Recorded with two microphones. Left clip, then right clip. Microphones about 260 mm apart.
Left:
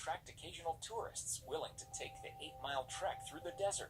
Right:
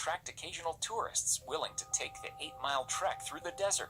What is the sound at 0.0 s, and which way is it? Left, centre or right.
Speech, right.